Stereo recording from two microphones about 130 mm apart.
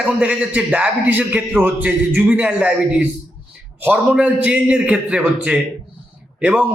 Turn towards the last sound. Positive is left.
turn(degrees=-10)  # may be behind; listen again after turning